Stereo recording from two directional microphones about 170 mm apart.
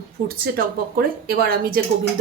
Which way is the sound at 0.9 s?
60° right (ahead or behind).